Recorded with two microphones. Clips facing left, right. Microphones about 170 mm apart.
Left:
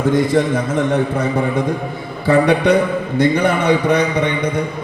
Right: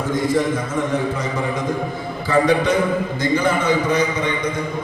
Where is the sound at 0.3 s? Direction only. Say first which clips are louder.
Left 3 dB; 65° left (ahead or behind).